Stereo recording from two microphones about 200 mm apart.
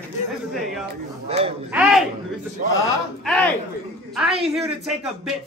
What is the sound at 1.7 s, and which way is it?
Speech, 5° right (ahead or behind).